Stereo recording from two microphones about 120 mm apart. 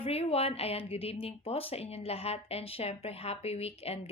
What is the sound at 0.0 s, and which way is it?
A woman's voice, 55° left (ahead or behind).